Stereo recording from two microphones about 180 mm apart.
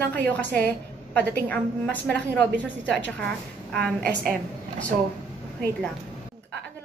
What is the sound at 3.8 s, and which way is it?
Speech, 65° right (ahead or behind).